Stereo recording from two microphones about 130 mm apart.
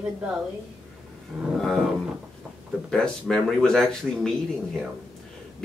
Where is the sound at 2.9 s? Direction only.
5° left (ahead or behind).